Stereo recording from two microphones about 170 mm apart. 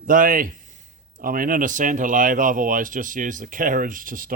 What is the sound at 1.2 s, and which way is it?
Speech, 55° right (ahead or behind).